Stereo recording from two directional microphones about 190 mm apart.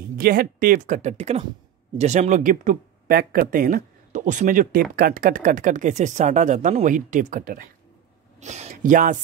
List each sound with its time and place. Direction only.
0.2 s speech: 50° right (ahead or behind)